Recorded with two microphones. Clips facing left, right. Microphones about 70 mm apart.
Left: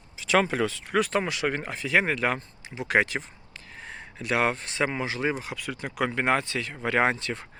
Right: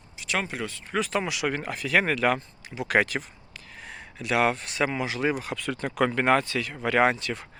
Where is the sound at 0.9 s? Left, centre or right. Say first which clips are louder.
Left 2 dB; left.